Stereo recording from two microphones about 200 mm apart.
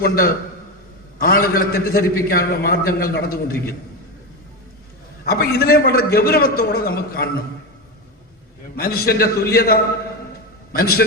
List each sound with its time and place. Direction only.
0.0 s a man's voice: 45° left (ahead or behind)
5.2 s a man's voice: 50° left (ahead or behind)
8.7 s a man's voice: 50° left (ahead or behind)